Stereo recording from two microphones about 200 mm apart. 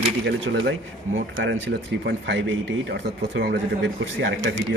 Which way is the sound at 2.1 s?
60° right (ahead or behind).